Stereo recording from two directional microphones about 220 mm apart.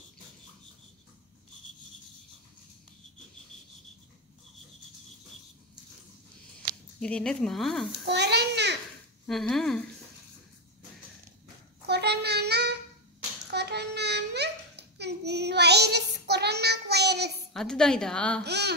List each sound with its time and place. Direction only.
7.0 s speech: 5° left (ahead or behind)
8.0 s a sound: 50° right (ahead or behind)
9.2 s speech: centre (ahead or behind)
11.8 s child singing: 50° right (ahead or behind)
13.5 s babbling: 50° right (ahead or behind)
17.5 s a woman's voice: 5° left (ahead or behind)
18.4 s a sound: 50° right (ahead or behind)